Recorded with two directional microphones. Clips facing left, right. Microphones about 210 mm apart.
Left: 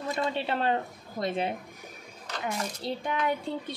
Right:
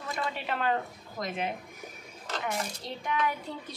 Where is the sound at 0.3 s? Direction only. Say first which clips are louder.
Left 1 dB; 30° left (ahead or behind).